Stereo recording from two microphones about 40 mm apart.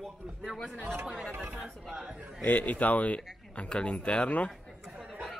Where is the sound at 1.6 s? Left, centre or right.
Centre.